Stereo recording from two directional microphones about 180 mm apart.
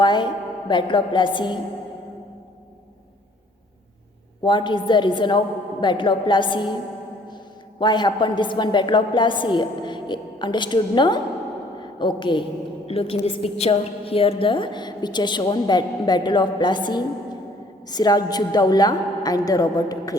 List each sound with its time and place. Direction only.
0.0 s a woman's voice: 25° left (ahead or behind)
4.4 s a woman's voice: 25° left (ahead or behind)